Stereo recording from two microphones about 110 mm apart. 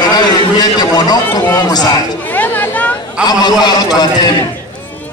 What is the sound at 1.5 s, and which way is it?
Speech, 35° left (ahead or behind).